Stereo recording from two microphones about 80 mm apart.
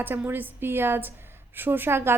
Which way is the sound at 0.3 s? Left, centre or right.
Right.